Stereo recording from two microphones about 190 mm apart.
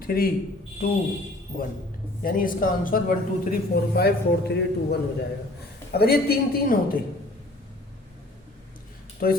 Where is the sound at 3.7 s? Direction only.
55° left (ahead or behind).